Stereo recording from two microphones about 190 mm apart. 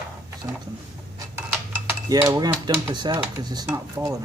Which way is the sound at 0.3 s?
15° right (ahead or behind).